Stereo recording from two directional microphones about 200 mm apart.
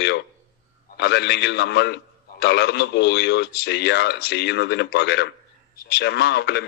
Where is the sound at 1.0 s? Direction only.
55° left (ahead or behind).